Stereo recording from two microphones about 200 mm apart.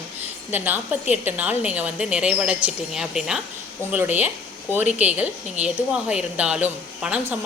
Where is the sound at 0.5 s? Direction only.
10° right (ahead or behind).